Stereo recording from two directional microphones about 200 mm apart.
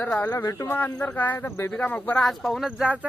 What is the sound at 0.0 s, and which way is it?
Speech, 10° left (ahead or behind).